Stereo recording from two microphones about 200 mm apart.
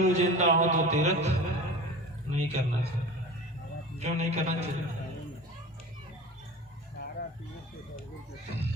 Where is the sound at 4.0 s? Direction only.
35° right (ahead or behind).